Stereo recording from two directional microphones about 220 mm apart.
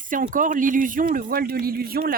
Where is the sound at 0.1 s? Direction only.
40° right (ahead or behind).